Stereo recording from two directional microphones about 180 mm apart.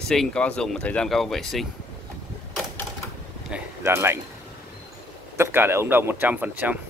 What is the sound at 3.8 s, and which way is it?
Speech, 15° right (ahead or behind).